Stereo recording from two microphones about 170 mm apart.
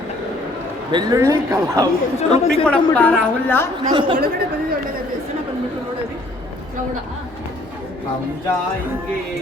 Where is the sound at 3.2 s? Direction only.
10° left (ahead or behind).